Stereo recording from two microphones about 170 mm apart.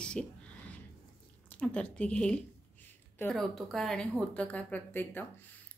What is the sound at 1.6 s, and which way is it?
Speech, 10° left (ahead or behind).